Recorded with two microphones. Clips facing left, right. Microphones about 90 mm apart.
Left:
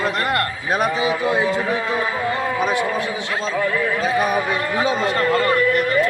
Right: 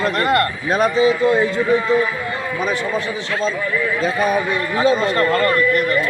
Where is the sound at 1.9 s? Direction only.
60° left (ahead or behind).